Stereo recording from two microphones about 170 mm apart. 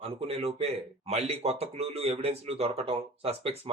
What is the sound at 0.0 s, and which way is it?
Speech, 35° right (ahead or behind).